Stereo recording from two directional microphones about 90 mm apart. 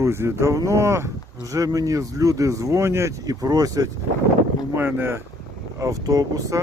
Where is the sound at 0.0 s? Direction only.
30° right (ahead or behind).